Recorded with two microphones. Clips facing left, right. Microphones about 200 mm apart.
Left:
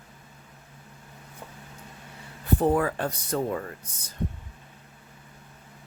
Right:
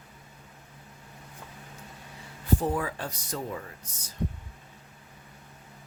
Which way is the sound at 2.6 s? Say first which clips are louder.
Left 6 dB; 60° left (ahead or behind).